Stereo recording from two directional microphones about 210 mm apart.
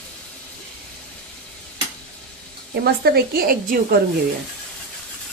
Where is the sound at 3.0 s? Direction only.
45° right (ahead or behind).